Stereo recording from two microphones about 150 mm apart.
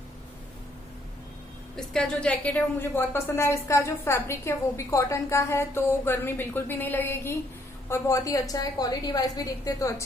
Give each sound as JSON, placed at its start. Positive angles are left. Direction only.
{"t": 1.8, "sound": "a woman's voice", "side_deg": 5}